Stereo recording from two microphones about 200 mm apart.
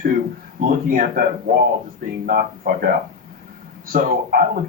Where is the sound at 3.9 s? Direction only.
45° right (ahead or behind).